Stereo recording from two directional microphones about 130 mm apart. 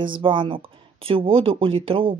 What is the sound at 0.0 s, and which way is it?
Speech, 40° right (ahead or behind).